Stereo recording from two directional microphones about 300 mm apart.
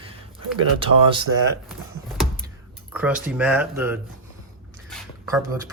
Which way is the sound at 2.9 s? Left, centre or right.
Centre.